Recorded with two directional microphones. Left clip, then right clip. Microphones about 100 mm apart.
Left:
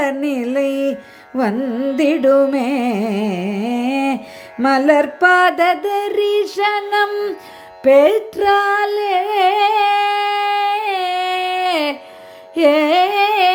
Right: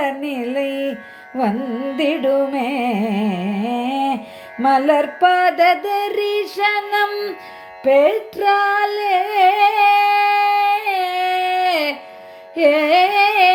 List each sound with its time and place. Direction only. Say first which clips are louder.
0.0 s a sound: left 3 dB; 40° left (ahead or behind)
1.4 s music: left 2 dB; 40° left (ahead or behind)
5.6 s a sound: right 1 dB; 20° left (ahead or behind)
7.9 s music: left 3 dB; 45° left (ahead or behind)
8.4 s singing: even; 15° left (ahead or behind)
12.5 s music: left 1 dB; 25° left (ahead or behind)